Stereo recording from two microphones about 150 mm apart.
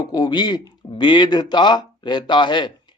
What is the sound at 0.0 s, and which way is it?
Speech, 25° left (ahead or behind).